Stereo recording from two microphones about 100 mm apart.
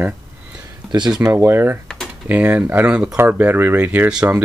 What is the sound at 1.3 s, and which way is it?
Speech, 25° right (ahead or behind).